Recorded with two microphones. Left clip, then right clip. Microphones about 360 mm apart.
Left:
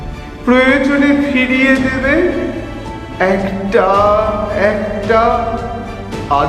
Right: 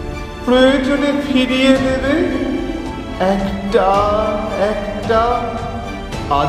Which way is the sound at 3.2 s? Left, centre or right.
Right.